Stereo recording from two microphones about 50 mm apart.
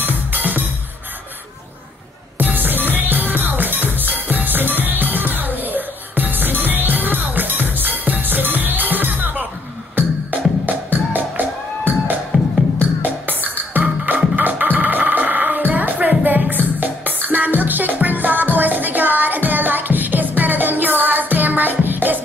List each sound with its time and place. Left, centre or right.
0.0 s music: right
2.3 s music: right
12.3 s music: right
13.0 s music: right